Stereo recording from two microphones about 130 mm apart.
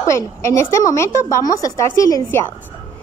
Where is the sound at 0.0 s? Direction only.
25° left (ahead or behind).